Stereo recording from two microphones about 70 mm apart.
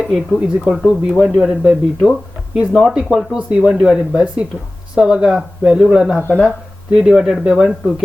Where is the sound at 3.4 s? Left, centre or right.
Centre.